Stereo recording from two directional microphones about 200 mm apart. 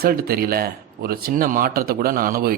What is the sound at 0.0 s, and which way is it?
Speech, 50° right (ahead or behind).